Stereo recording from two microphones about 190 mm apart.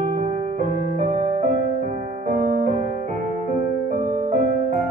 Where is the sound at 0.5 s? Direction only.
35° right (ahead or behind).